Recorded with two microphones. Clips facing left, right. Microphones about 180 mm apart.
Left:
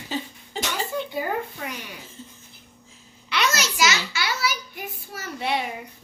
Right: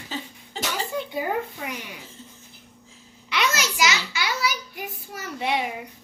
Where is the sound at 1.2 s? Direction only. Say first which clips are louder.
Right 3 dB; 15° right (ahead or behind).